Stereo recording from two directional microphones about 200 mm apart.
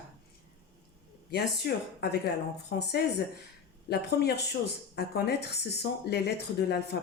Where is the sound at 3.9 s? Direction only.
55° left (ahead or behind).